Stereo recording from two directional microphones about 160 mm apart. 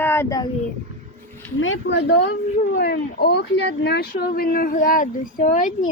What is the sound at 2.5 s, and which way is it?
Speech, 70° left (ahead or behind).